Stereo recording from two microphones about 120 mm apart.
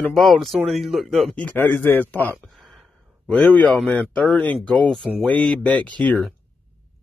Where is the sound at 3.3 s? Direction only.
5° left (ahead or behind).